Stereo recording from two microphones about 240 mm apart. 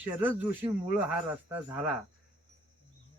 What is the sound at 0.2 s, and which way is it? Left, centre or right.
Speech, centre.